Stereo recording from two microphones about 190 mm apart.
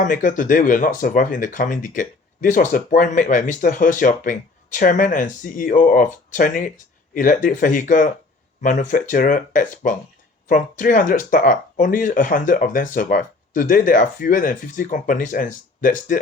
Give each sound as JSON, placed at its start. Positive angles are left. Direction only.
{"t": 0.0, "sound": "speech", "side_deg": 45}